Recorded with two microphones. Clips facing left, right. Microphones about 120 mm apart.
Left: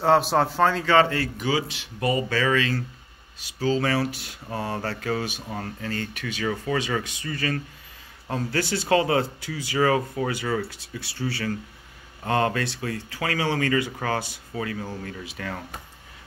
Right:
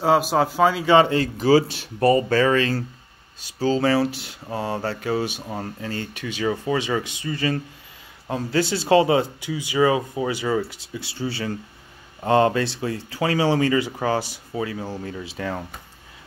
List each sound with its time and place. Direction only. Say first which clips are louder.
0.0 s a man's voice: right 1 dB; 5° right (ahead or behind)
0.9 s speech: right 4 dB; 20° right (ahead or behind)
1.4 s speech: right 9 dB; 35° right (ahead or behind)